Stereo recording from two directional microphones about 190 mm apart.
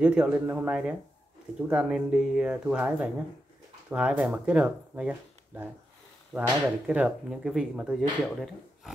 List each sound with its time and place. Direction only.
0.0 s speech: 5° right (ahead or behind)